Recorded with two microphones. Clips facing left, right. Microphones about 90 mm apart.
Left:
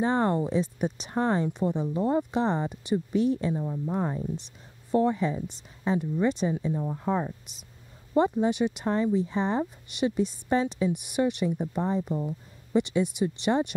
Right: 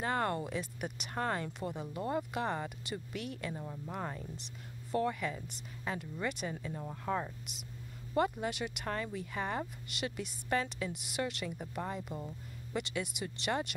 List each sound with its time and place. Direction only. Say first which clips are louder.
0.0 s speech: left 9 dB; 25° left (ahead or behind)